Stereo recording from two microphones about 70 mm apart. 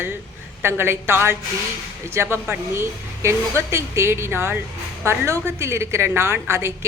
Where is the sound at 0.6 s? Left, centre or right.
Right.